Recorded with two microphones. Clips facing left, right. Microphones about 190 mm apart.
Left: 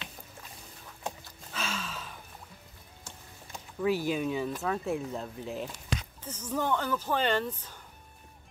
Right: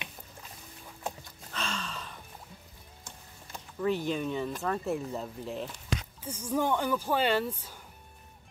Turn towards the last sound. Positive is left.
turn(degrees=-10)  # may be behind; listen again after turning